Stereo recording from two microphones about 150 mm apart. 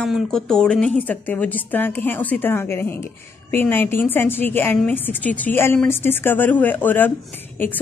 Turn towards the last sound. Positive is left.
turn(degrees=15)  # may be behind; listen again after turning